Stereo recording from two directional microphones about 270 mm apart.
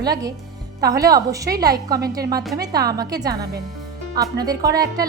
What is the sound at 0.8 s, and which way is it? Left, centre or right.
Speech, centre.